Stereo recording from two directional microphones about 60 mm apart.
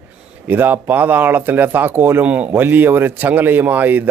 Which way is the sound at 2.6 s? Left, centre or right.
Right.